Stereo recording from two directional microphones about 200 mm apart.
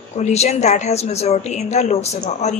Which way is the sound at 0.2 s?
35° left (ahead or behind).